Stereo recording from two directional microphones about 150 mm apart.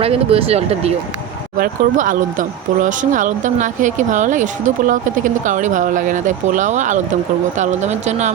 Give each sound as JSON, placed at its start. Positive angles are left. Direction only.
{"t": 0.0, "sound": "speech", "side_deg": -40}
{"t": 1.5, "sound": "speech", "side_deg": -65}